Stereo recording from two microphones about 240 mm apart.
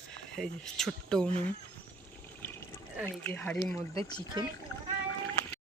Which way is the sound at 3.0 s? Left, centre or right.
Centre.